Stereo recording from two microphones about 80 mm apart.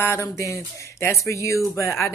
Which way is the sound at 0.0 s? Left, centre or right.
Left.